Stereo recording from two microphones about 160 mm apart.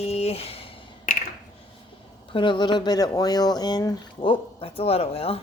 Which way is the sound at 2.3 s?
30° left (ahead or behind).